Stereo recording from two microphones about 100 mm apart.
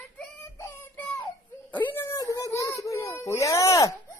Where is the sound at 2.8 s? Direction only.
30° left (ahead or behind).